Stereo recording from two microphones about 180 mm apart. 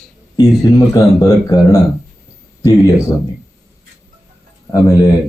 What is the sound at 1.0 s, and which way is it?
Speech, 20° left (ahead or behind).